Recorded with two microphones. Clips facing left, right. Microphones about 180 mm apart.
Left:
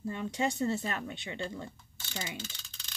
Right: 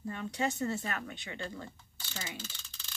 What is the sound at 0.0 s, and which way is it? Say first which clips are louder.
Speech: left 2 dB; 25° left (ahead or behind).